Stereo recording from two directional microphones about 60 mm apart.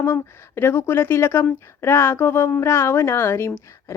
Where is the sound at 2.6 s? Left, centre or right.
Left.